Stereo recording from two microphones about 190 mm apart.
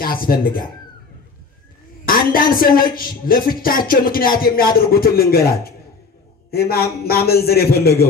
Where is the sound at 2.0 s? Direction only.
50° left (ahead or behind).